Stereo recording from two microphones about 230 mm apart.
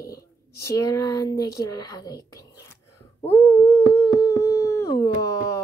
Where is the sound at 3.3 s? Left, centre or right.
Centre.